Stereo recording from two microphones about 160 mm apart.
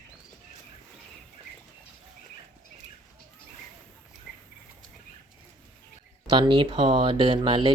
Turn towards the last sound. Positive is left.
turn(degrees=-30)  # may be behind; listen again after turning